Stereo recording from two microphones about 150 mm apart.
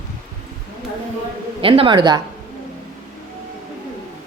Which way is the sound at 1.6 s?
35° right (ahead or behind).